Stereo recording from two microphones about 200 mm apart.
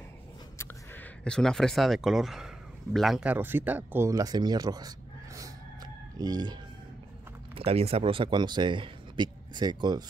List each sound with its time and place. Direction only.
0.6 s speech: 5° left (ahead or behind); by 10.0 s 20° right (ahead or behind)